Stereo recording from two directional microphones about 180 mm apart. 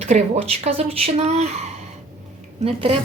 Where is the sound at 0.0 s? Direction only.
40° right (ahead or behind).